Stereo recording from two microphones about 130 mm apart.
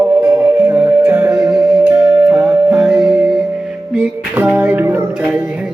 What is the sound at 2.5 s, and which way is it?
Music, 10° right (ahead or behind).